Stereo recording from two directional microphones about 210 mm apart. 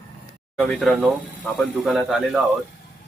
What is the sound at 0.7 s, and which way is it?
Speech, centre (ahead or behind).